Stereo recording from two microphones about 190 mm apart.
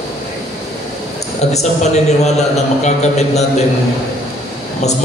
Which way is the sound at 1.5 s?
35° left (ahead or behind).